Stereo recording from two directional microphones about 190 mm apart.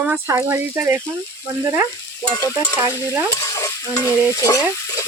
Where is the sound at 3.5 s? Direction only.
15° left (ahead or behind).